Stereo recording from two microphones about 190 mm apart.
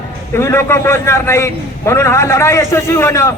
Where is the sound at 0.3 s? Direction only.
15° left (ahead or behind).